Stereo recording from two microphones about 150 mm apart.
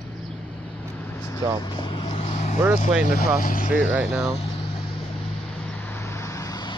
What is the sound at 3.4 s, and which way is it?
Speech, 65° left (ahead or behind).